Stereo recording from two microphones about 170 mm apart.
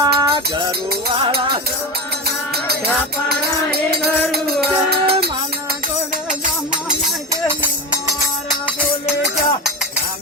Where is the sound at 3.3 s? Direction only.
65° right (ahead or behind).